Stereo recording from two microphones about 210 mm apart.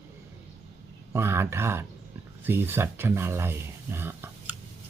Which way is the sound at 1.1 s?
10° right (ahead or behind).